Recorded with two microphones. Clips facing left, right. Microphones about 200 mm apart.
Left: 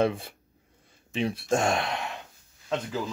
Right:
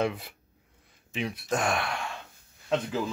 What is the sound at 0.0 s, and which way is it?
Speech, 30° left (ahead or behind).